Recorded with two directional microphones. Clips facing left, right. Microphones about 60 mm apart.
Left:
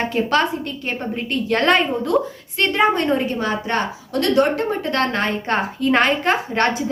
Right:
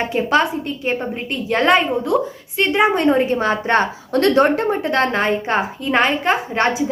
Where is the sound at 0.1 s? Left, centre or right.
Centre.